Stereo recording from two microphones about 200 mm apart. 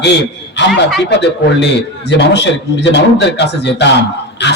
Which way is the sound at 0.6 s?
60° left (ahead or behind).